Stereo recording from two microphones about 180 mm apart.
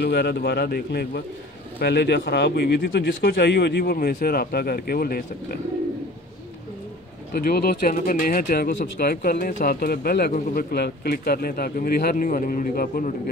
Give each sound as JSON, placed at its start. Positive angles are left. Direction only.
{"t": 0.0, "sound": "speech", "side_deg": 65}
{"t": 7.3, "sound": "speech", "side_deg": 60}